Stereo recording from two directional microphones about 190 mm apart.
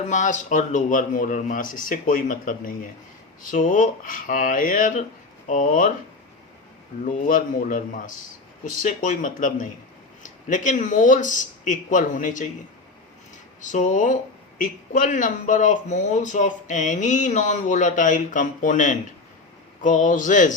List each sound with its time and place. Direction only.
0.0 s speech: 40° left (ahead or behind)
7.0 s speech: 45° left (ahead or behind)
13.6 s speech: 40° left (ahead or behind)